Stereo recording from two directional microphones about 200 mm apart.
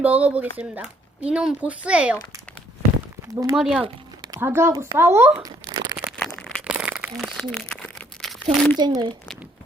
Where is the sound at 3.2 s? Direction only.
15° right (ahead or behind).